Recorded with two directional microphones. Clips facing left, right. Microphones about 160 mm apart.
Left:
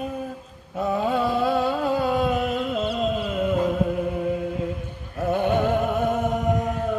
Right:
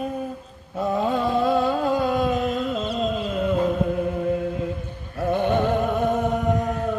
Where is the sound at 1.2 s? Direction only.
10° left (ahead or behind).